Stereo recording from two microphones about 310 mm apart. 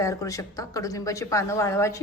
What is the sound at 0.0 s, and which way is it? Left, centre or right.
A woman's voice, centre.